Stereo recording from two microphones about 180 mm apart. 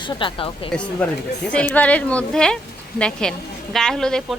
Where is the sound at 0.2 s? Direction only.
30° left (ahead or behind).